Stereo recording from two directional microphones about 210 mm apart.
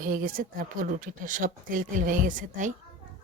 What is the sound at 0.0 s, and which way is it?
Speech, 40° right (ahead or behind).